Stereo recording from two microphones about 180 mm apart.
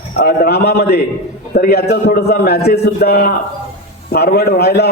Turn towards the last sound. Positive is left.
turn(degrees=65)  # may be behind; listen again after turning